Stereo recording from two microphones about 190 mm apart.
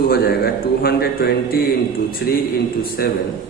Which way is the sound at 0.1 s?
55° left (ahead or behind).